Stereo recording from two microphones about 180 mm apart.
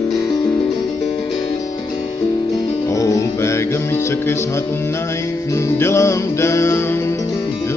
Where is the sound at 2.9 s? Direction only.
15° left (ahead or behind).